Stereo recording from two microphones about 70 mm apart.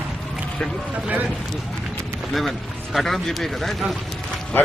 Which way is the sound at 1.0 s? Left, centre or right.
Right.